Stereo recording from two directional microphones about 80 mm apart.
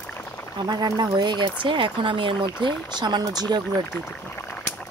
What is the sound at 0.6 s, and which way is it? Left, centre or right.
Speech, right.